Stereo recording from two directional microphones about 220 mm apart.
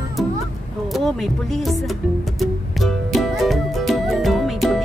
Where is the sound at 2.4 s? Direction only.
Centre (ahead or behind).